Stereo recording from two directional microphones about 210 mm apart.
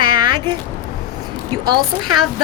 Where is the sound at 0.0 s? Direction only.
20° right (ahead or behind).